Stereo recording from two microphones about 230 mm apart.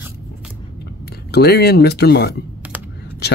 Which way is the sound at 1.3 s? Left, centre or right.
Left.